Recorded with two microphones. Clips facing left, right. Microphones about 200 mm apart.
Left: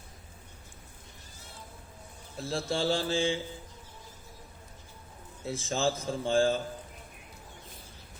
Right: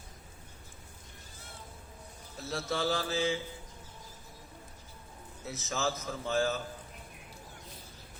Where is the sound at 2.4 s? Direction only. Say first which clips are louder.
Left 3 dB; 30° left (ahead or behind).